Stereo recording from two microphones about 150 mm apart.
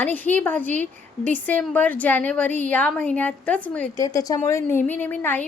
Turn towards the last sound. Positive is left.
turn(degrees=10)  # may be behind; listen again after turning